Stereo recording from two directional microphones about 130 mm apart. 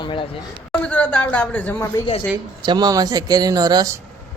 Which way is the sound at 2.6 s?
35° right (ahead or behind).